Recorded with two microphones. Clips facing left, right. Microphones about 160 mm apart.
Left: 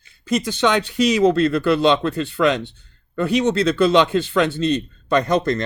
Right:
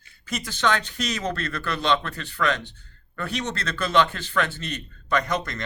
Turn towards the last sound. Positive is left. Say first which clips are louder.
# left 8 dB
turn(degrees=30)  # may be behind; listen again after turning